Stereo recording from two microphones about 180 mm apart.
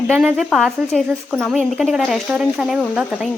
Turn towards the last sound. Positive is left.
turn(degrees=-5)  # may be behind; listen again after turning